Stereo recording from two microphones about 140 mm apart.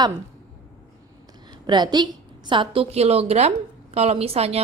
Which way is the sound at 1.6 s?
30° right (ahead or behind).